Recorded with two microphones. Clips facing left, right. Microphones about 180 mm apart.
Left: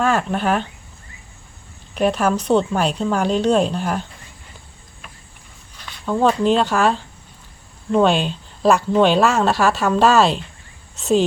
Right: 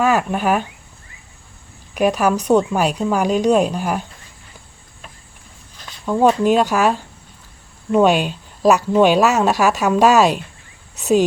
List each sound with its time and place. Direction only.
0.0 s a woman's voice: 5° right (ahead or behind)
2.0 s a woman's voice: 10° right (ahead or behind)
6.1 s a woman's voice: 10° right (ahead or behind)